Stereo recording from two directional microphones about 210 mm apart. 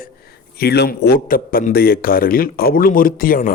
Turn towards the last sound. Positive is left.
turn(degrees=40)  # may be behind; listen again after turning